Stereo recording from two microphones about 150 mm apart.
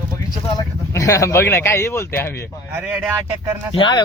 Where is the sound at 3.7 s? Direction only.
30° left (ahead or behind).